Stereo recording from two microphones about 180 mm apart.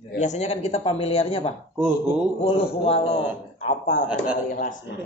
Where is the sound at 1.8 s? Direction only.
5° right (ahead or behind).